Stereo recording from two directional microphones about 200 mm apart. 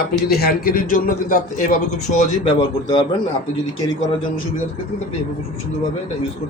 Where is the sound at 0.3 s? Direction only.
50° left (ahead or behind).